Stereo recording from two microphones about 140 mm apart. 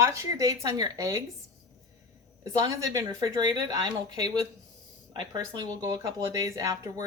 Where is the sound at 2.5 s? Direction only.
30° right (ahead or behind).